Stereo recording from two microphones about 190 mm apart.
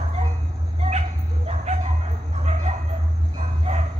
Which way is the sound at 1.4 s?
35° right (ahead or behind).